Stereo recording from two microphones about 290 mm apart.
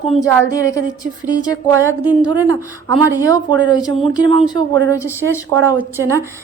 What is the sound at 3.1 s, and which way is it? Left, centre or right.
A woman's voice, centre.